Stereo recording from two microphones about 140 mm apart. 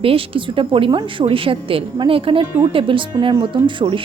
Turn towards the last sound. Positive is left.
turn(degrees=-35)  # may be behind; listen again after turning